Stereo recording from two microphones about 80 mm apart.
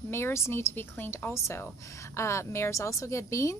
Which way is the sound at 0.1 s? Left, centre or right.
Left.